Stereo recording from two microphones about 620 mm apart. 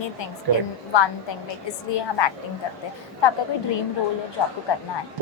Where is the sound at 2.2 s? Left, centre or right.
Left.